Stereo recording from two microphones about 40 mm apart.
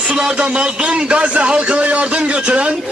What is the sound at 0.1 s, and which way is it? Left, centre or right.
A man's voice, right.